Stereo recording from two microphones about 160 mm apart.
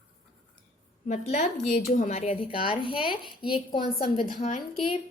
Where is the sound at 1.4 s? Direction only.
70° left (ahead or behind).